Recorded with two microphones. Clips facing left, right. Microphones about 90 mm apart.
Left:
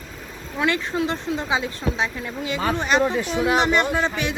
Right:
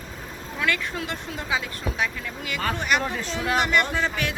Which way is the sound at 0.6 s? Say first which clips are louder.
Left 5 dB; 25° left (ahead or behind).